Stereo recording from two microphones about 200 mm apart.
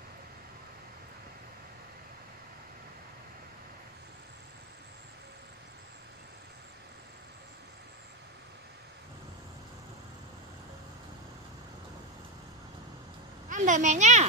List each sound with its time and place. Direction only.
13.5 s speech: 40° right (ahead or behind)